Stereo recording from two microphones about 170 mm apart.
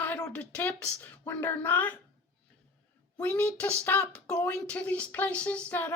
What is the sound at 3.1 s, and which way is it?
Speech, 10° left (ahead or behind).